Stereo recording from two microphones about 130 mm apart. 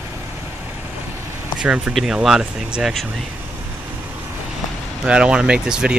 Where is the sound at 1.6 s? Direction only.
5° right (ahead or behind).